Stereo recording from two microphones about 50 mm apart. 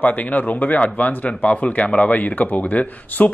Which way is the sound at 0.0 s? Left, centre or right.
Left.